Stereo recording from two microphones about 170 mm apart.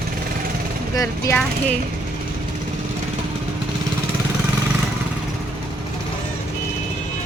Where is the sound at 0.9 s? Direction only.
20° left (ahead or behind).